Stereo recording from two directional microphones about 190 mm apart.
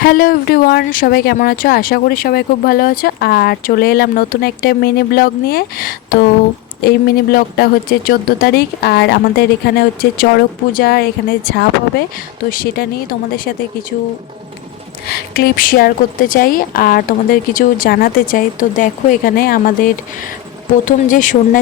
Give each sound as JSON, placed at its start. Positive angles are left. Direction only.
{"t": 0.0, "sound": "speech", "side_deg": 50}
{"t": 15.1, "sound": "speech", "side_deg": 55}